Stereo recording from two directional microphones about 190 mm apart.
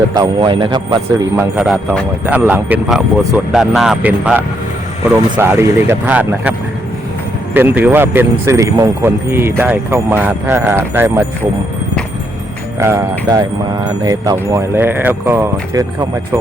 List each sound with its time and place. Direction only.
0.2 s speech: 25° right (ahead or behind)
1.5 s speech: 5° right (ahead or behind)
7.5 s speech: 10° right (ahead or behind)
12.8 s speech: 15° right (ahead or behind)